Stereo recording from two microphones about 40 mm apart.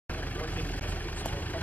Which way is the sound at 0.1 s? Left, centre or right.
Left.